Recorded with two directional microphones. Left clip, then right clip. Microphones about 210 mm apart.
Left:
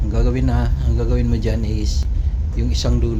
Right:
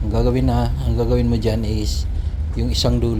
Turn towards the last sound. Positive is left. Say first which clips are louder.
# right 3 dB
turn(degrees=-15)  # may be behind; listen again after turning